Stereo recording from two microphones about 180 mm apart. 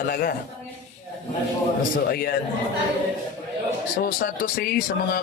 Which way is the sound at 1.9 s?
55° left (ahead or behind).